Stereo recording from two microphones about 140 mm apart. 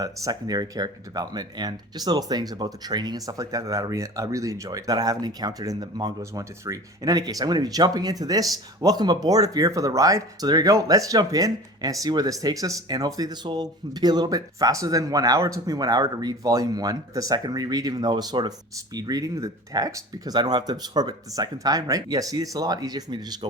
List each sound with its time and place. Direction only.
0.0 s speech: 25° right (ahead or behind)